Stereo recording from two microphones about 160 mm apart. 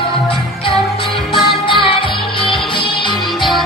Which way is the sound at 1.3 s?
30° left (ahead or behind).